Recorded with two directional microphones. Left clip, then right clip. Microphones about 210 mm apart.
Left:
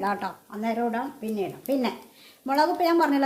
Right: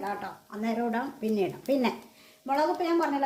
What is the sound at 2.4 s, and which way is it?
Speech, 30° left (ahead or behind).